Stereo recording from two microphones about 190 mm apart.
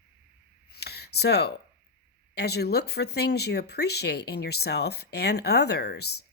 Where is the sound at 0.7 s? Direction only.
60° left (ahead or behind).